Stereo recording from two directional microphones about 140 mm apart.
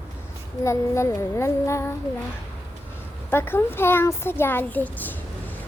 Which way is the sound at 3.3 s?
15° left (ahead or behind).